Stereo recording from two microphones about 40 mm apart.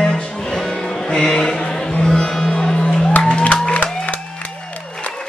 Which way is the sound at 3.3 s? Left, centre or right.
Left.